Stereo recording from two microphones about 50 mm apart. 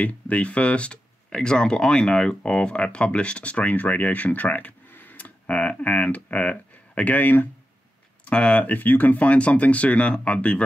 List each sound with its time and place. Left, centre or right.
0.0 s speech: left
8.3 s speech: left
8.6 s speech: left